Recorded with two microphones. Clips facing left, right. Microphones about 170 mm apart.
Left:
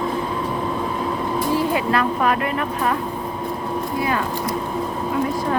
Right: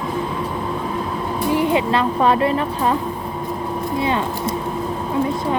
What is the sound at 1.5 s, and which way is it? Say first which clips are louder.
Speech: right 4 dB; 20° right (ahead or behind).